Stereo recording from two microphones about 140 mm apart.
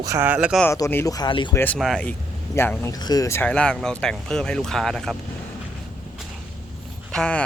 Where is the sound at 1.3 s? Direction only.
35° left (ahead or behind).